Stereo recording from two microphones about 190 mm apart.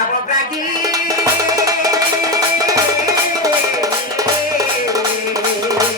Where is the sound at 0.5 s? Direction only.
20° right (ahead or behind).